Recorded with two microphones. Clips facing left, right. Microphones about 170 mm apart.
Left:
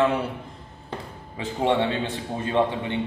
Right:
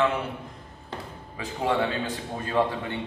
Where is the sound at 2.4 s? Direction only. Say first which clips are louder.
Left 2 dB; 20° left (ahead or behind).